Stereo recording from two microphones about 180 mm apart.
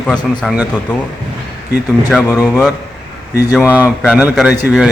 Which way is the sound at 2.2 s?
15° left (ahead or behind).